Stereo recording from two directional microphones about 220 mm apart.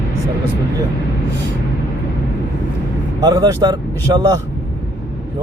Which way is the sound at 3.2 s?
20° right (ahead or behind).